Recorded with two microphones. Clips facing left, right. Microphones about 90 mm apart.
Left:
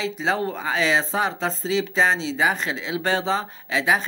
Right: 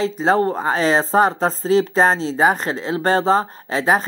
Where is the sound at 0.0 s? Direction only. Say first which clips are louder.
Right 7 dB; 40° right (ahead or behind).